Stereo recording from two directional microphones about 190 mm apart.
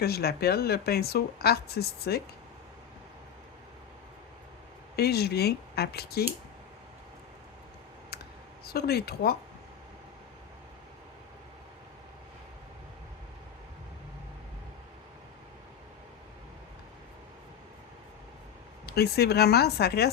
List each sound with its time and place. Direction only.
0.0 s a woman's voice: 55° left (ahead or behind)
4.9 s a woman's voice: 55° left (ahead or behind)
8.1 s computer keyboard: 55° left (ahead or behind)
8.6 s a woman's voice: 55° left (ahead or behind)
18.9 s a woman's voice: 55° left (ahead or behind)